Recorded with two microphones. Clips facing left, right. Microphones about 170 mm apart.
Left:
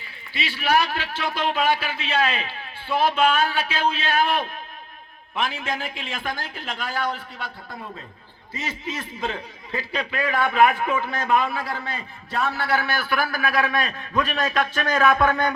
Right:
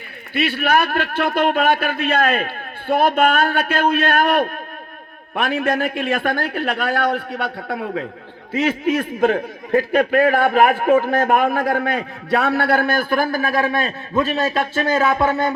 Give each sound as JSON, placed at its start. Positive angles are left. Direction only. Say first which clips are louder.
{"t": 0.3, "sound": "a man's voice", "louder": "right 5 dB", "side_deg": -60}
{"t": 8.5, "sound": "a man's voice", "louder": "right 13 dB", "side_deg": -60}
{"t": 13.7, "sound": "a man's voice", "louder": "right 4 dB", "side_deg": -25}